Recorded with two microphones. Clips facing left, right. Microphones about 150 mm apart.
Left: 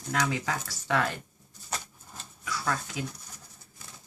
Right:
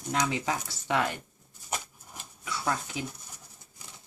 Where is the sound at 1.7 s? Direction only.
20° right (ahead or behind).